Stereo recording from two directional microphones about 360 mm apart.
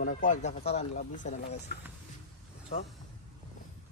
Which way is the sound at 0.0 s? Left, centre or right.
Left.